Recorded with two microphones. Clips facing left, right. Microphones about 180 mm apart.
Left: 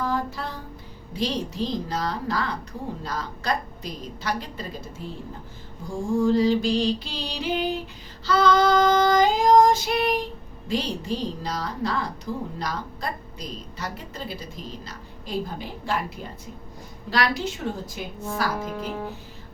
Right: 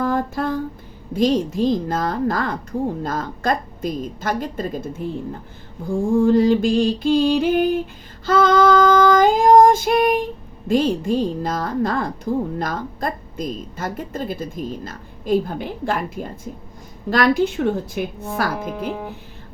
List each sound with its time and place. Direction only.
0.0 s a sound: 50° right (ahead or behind)
1.1 s a woman's voice: 50° right (ahead or behind)
6.1 s a woman's voice: 55° right (ahead or behind)